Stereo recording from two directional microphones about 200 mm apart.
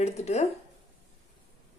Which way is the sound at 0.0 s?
35° left (ahead or behind).